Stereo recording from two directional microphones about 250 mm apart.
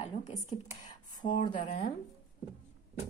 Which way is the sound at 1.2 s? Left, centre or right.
Left.